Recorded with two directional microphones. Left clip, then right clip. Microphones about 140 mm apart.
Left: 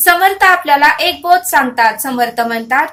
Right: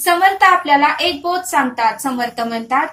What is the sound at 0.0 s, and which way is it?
A woman's voice, 35° left (ahead or behind).